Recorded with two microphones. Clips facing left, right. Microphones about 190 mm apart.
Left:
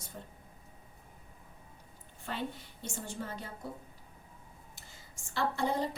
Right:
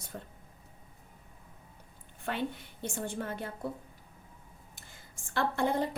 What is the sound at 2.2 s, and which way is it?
A woman's voice, 60° right (ahead or behind).